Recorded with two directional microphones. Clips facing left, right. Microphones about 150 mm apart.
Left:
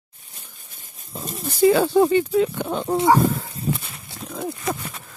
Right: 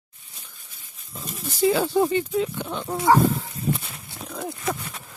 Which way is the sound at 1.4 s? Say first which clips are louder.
Left 5 dB; 50° left (ahead or behind).